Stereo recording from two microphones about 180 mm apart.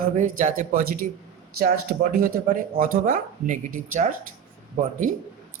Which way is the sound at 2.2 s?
50° right (ahead or behind).